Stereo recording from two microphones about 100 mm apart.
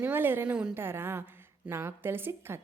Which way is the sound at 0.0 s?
20° right (ahead or behind).